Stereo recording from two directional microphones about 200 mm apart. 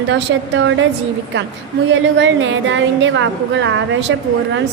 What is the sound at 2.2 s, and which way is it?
A woman's voice, 70° right (ahead or behind).